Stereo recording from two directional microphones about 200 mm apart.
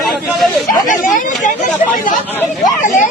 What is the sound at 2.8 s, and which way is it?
Speech, 40° left (ahead or behind).